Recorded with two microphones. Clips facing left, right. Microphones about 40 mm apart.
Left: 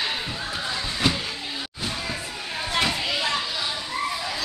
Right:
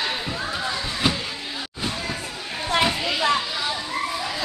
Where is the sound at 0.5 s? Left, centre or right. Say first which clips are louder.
Right 2 dB; centre.